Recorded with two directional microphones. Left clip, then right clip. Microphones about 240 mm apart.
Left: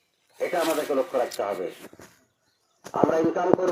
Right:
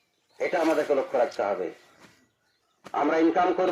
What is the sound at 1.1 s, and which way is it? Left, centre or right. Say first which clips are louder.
Speech: right 1 dB; right.